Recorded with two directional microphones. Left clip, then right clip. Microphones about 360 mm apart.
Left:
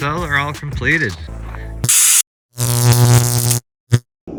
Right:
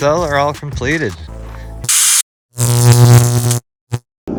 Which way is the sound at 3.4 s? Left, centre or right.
Right.